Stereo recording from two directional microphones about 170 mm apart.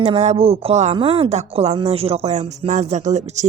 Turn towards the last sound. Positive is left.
turn(degrees=-45)  # may be behind; listen again after turning